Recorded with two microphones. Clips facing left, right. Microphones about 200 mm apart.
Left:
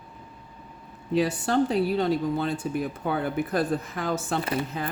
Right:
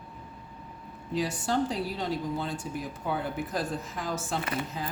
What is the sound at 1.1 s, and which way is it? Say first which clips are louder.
Speech: left 5 dB; 60° left (ahead or behind).